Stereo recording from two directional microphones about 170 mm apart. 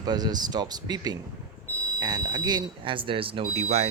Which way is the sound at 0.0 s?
25° right (ahead or behind).